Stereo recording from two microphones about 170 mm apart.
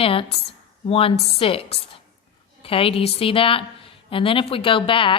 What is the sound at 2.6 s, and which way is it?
A woman's voice, 35° left (ahead or behind).